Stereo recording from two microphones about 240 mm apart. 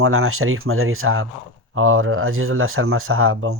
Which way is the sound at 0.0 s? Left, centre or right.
Right.